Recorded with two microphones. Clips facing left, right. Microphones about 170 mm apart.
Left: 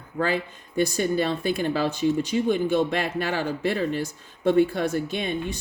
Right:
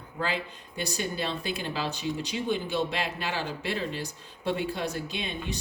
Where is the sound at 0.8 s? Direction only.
50° left (ahead or behind).